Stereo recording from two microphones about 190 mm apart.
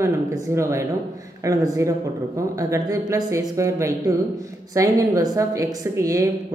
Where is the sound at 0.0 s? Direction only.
15° right (ahead or behind).